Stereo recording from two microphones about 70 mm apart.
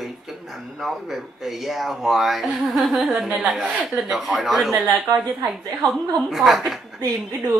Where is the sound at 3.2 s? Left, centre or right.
Centre.